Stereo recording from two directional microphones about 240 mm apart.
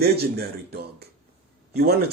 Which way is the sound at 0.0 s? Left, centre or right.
Right.